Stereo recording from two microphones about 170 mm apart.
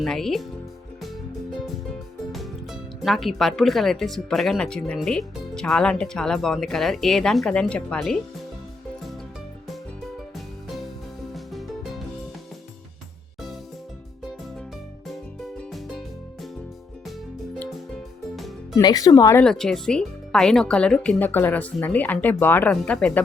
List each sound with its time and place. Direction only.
0.0 s speech: centre (ahead or behind)
1.5 s speech: centre (ahead or behind)
11.3 s music: centre (ahead or behind)
15.7 s music: centre (ahead or behind)
18.3 s music: centre (ahead or behind)
18.8 s speech: 25° left (ahead or behind)
19.4 s speech: 5° left (ahead or behind)